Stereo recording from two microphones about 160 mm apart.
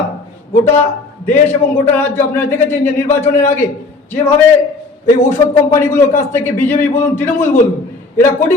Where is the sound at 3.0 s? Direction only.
45° left (ahead or behind).